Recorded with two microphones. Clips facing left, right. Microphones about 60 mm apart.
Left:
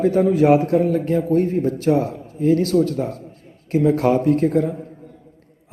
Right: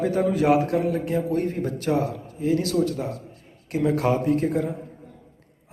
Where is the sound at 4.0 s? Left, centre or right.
Left.